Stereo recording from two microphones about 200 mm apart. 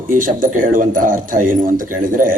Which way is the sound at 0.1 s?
40° right (ahead or behind).